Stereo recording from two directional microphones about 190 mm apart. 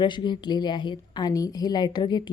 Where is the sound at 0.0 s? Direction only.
25° left (ahead or behind).